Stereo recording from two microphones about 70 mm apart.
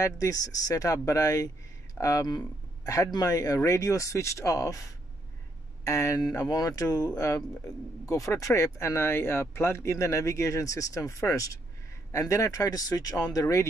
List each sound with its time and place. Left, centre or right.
0.0 s speech: left
3.1 s speech: left
6.2 s speech: left